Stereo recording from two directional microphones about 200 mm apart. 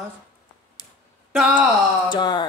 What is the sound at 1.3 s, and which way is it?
Speech, 5° right (ahead or behind).